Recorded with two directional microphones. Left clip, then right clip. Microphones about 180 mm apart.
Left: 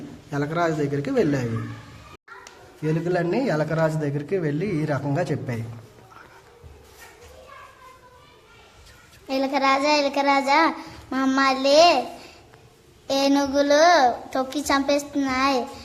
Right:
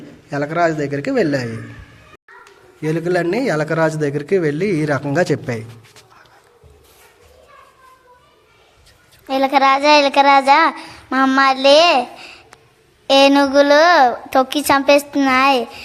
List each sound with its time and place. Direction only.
0.3 s a child's voice: 30° right (ahead or behind)
2.8 s a man's voice: 25° right (ahead or behind)
9.2 s a child's voice: 25° right (ahead or behind)